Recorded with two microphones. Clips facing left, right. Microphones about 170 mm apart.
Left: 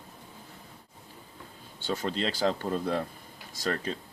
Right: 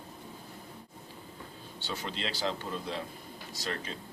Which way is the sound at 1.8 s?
50° left (ahead or behind).